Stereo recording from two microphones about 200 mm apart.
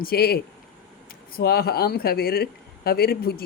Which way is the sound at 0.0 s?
50° left (ahead or behind).